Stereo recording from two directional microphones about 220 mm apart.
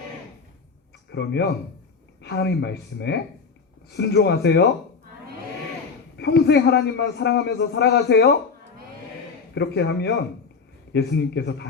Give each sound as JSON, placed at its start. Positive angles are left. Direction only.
{"t": 1.1, "sound": "a man's voice", "side_deg": 50}
{"t": 6.1, "sound": "a man's voice", "side_deg": 50}
{"t": 9.6, "sound": "a man's voice", "side_deg": 50}